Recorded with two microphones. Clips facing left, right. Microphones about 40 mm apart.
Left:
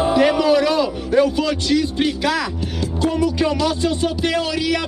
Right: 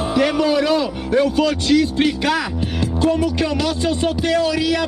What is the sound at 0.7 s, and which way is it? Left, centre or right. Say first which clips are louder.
A man's voice: left 1 dB; centre.